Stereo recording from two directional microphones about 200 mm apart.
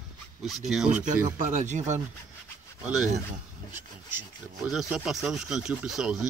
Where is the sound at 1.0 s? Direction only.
40° right (ahead or behind).